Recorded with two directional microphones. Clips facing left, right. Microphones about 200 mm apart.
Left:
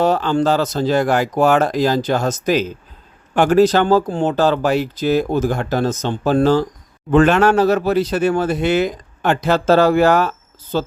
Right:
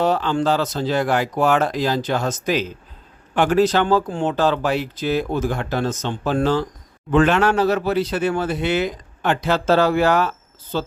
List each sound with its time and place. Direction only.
0.0 s speech: 45° left (ahead or behind)